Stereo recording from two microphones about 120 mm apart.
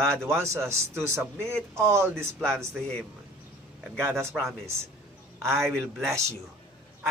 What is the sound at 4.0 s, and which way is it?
Speech, 20° right (ahead or behind).